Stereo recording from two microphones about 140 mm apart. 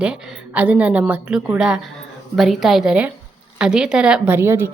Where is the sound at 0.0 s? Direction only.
10° right (ahead or behind).